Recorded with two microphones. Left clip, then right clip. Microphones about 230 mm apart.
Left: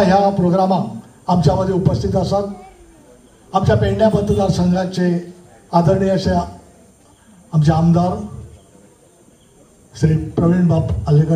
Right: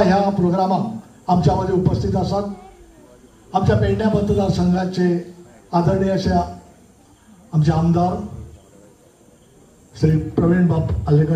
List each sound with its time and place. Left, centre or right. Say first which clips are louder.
0.0 s a man's voice: left 3 dB; left
3.5 s a man's voice: left 3 dB; left
7.5 s a man's voice: left 3 dB; left
9.9 s a man's voice: even; left